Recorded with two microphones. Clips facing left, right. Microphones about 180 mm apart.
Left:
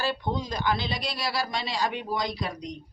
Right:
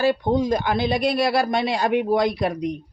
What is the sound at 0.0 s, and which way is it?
Speech, 50° right (ahead or behind).